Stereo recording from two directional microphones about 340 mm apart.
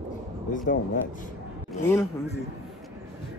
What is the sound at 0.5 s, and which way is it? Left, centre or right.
Speech, left.